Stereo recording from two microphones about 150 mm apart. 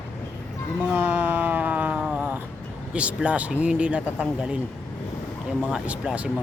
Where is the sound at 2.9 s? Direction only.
10° right (ahead or behind).